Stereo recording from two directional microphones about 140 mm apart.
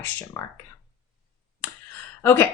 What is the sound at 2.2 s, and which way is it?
Speech, 15° left (ahead or behind).